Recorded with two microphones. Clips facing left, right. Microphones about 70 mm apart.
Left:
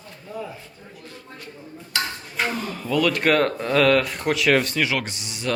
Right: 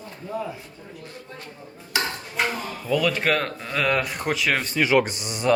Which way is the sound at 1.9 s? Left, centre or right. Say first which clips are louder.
Right 1 dB; centre.